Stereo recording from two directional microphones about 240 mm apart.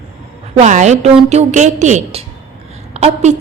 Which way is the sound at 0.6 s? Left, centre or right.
Right.